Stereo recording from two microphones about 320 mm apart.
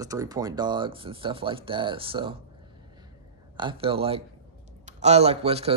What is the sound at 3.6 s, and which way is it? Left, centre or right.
A man's voice, centre.